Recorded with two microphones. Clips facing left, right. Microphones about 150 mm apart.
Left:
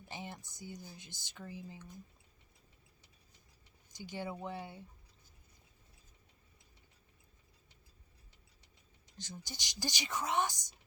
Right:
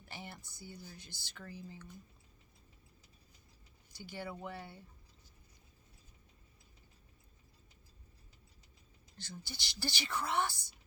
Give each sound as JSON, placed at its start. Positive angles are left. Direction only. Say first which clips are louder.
{"t": 0.0, "sound": "speech", "louder": "left 3 dB", "side_deg": 15}
{"t": 3.9, "sound": "a woman's voice", "louder": "left 3 dB", "side_deg": 15}
{"t": 9.1, "sound": "a woman's voice", "louder": "left 1 dB", "side_deg": 15}